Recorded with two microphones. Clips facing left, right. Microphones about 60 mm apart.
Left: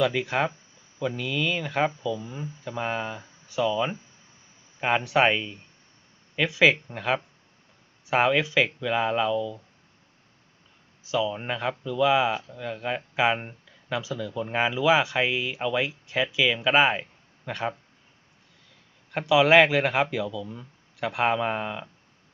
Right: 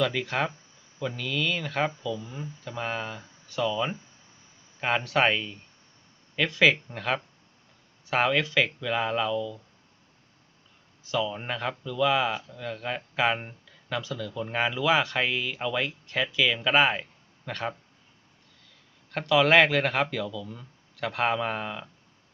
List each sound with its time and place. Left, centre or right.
0.0 s speech: centre
2.0 s speech: left
11.0 s speech: centre
19.1 s speech: centre